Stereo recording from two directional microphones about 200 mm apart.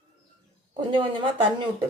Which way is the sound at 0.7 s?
25° right (ahead or behind).